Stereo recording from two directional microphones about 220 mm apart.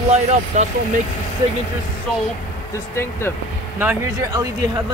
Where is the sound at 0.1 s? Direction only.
30° right (ahead or behind).